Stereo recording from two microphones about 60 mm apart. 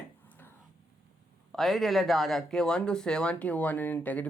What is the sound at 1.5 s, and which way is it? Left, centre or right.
Speech, centre.